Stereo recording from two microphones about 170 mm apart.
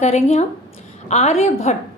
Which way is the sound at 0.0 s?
40° left (ahead or behind).